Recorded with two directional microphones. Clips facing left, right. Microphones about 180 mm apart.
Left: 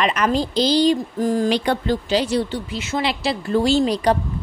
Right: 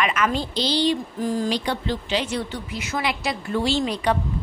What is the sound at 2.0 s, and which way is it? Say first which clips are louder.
A woman's voice: left 6 dB; 35° left (ahead or behind).